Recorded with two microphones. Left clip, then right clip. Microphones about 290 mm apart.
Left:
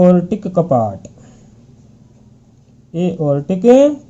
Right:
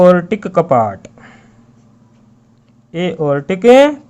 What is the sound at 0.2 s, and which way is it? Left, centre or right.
Speech, centre.